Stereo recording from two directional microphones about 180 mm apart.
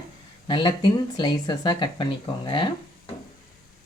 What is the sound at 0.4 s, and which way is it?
Speech, 25° left (ahead or behind).